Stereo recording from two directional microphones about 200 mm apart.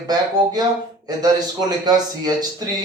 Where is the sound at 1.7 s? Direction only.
20° right (ahead or behind).